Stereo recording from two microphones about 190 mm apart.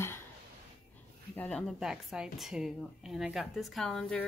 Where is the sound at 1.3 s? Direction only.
5° left (ahead or behind).